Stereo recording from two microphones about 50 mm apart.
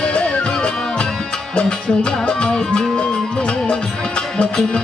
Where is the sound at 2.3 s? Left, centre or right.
Centre.